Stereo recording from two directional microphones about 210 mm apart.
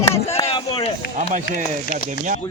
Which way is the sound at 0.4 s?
30° left (ahead or behind).